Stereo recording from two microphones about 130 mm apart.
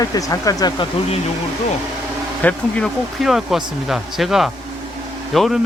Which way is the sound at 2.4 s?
10° left (ahead or behind).